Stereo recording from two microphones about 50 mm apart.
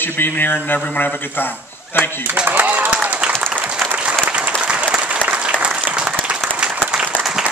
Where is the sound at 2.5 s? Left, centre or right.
Right.